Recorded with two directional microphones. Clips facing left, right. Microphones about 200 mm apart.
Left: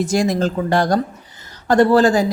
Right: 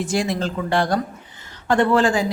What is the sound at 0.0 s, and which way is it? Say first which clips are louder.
Speech: left 5 dB; 40° left (ahead or behind).